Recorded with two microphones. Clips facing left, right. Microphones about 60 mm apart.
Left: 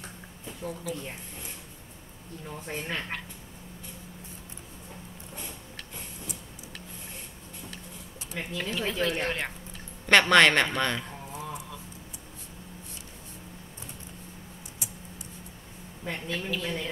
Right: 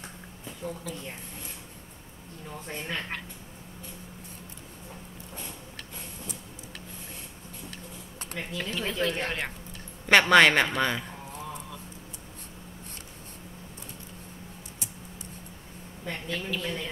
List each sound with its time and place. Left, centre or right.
0.5 s speech: centre
2.5 s a woman's voice: centre
8.4 s speech: centre
11.3 s a sound: centre
16.0 s a woman's voice: centre